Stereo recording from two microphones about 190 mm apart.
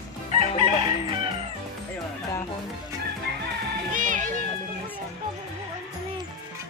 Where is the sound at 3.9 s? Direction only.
40° right (ahead or behind).